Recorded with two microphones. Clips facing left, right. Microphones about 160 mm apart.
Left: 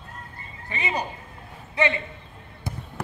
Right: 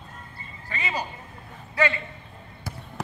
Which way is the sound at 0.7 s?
20° left (ahead or behind).